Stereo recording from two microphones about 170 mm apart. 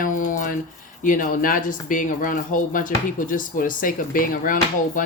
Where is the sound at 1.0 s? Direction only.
50° left (ahead or behind).